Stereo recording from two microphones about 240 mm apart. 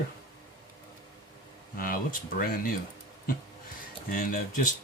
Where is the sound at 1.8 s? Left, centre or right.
Left.